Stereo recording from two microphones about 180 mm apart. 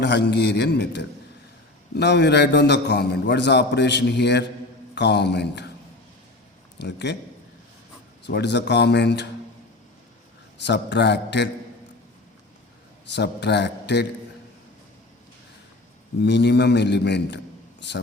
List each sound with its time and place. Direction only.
0.0 s a man's voice: 70° left (ahead or behind)
6.7 s speech: 70° left (ahead or behind)
8.2 s a man's voice: 70° left (ahead or behind)
10.7 s a man's voice: 75° left (ahead or behind)
13.1 s a man's voice: 70° left (ahead or behind)
16.2 s a man's voice: 70° left (ahead or behind)